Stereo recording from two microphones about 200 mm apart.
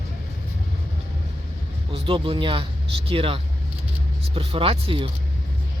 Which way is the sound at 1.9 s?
25° right (ahead or behind).